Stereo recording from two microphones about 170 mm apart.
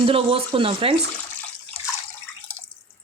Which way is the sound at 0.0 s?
35° right (ahead or behind).